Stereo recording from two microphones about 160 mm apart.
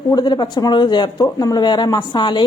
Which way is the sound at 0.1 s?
25° left (ahead or behind).